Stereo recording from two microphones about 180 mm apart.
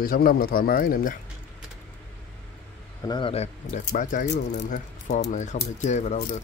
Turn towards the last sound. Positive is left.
turn(degrees=40)  # may be behind; listen again after turning